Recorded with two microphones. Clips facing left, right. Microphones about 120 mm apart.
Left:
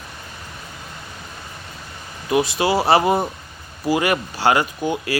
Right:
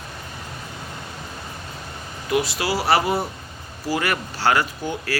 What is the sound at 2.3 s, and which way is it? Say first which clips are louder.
Speech: left 4 dB; 20° left (ahead or behind).